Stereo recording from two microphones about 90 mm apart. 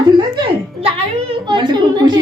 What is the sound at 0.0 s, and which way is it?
Music, 55° right (ahead or behind).